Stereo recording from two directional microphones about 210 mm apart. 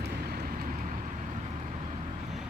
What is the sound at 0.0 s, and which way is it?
Vehicle, 50° right (ahead or behind).